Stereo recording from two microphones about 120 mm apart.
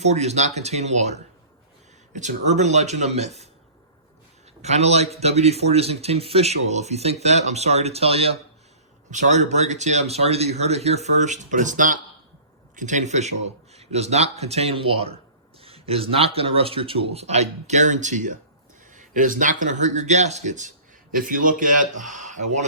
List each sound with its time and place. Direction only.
0.0 s speech: 65° right (ahead or behind)
2.1 s speech: 80° right; by 3.5 s 65° right (ahead or behind)
4.6 s speech: 65° right (ahead or behind)
9.0 s speech: 90° right